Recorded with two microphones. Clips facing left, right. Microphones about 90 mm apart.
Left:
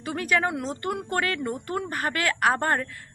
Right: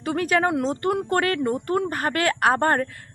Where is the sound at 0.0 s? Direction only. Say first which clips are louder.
Right 4 dB; 35° right (ahead or behind).